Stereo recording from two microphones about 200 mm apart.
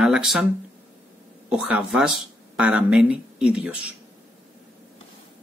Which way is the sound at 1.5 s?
5° right (ahead or behind).